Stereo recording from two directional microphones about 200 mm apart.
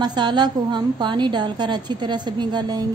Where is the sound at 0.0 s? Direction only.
20° right (ahead or behind).